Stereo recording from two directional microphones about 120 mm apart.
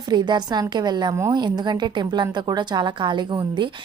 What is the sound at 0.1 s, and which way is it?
A woman's voice, 35° right (ahead or behind).